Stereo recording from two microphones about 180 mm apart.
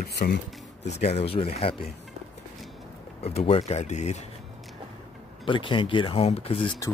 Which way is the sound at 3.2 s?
35° left (ahead or behind).